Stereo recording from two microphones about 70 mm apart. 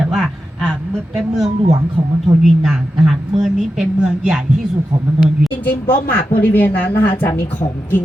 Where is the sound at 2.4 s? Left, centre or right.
Centre.